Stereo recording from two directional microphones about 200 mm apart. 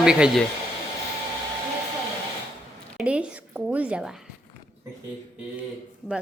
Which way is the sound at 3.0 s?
5° right (ahead or behind).